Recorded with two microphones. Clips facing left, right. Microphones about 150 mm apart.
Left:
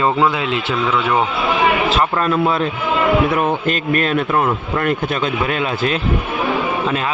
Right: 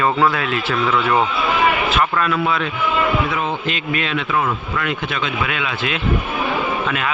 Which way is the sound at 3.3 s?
55° left (ahead or behind).